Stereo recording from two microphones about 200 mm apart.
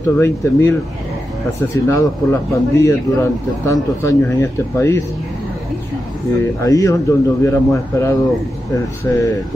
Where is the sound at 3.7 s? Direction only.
15° left (ahead or behind).